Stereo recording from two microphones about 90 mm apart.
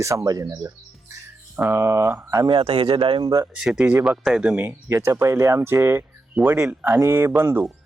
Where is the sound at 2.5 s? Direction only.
75° right (ahead or behind).